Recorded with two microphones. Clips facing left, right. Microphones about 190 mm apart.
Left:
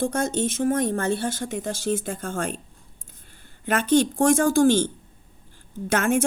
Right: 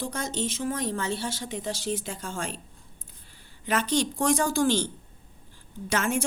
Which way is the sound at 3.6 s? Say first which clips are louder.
Left 6 dB; 50° left (ahead or behind).